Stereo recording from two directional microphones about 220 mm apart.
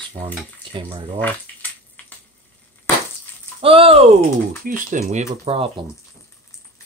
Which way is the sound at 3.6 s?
25° right (ahead or behind).